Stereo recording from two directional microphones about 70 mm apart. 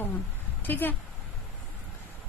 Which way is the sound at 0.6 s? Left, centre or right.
Left.